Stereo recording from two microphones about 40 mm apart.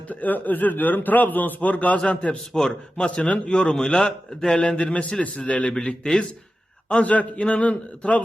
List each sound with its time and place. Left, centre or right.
0.1 s speech: left
2.5 s a man's voice: centre
3.2 s a man's voice: left